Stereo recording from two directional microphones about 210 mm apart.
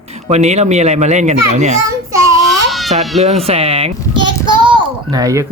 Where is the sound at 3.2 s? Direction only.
30° right (ahead or behind).